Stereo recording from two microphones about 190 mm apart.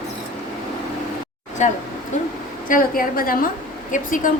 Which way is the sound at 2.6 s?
45° left (ahead or behind).